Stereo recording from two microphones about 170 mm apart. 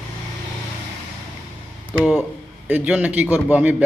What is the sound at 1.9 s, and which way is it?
A man's voice, 5° right (ahead or behind).